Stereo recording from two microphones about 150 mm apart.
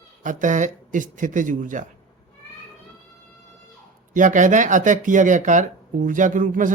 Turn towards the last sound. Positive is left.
turn(degrees=-60)  # may be behind; listen again after turning